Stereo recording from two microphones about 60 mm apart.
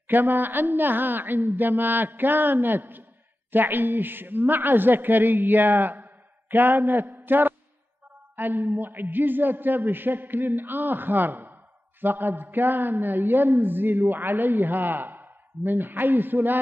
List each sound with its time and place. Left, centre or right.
0.0 s a woman's voice: right
7.2 s a sound: right
8.4 s a woman's voice: right